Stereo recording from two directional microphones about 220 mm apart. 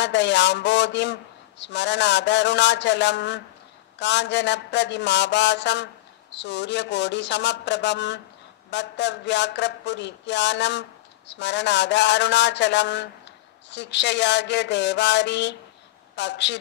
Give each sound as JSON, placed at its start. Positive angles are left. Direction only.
{"t": 0.0, "sound": "speech", "side_deg": 55}